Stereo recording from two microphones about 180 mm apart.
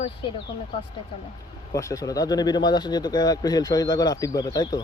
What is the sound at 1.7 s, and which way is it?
Speech, 20° left (ahead or behind).